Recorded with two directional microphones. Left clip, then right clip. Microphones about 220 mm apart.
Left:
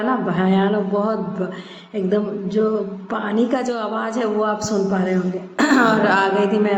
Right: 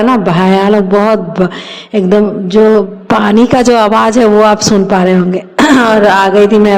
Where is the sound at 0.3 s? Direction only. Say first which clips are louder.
Right 11 dB; 45° right (ahead or behind).